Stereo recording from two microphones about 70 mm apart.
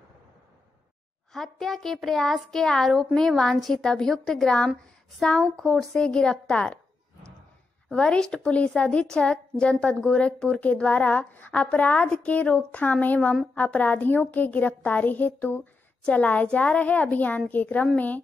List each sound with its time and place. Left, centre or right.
1.3 s a child's voice: centre
7.9 s a woman's voice: centre